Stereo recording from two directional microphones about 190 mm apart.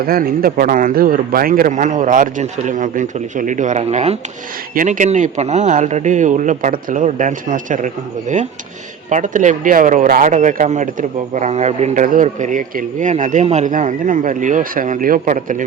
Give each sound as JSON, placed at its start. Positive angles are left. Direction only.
{"t": 0.0, "sound": "a man's voice", "side_deg": -50}
{"t": 9.0, "sound": "speech", "side_deg": -40}